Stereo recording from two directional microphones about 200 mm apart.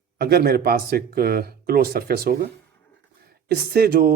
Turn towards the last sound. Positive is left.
turn(degrees=-50)  # may be behind; listen again after turning